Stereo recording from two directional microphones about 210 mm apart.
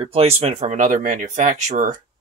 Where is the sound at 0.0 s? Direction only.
25° right (ahead or behind).